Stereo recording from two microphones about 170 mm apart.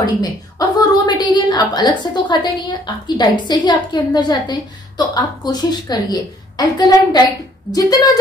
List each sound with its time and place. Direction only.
0.0 s a woman's voice: 20° left (ahead or behind)